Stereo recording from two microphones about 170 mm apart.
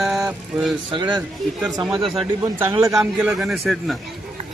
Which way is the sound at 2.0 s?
Centre (ahead or behind).